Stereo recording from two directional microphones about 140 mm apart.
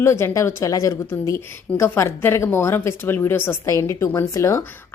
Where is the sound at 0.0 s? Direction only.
20° left (ahead or behind).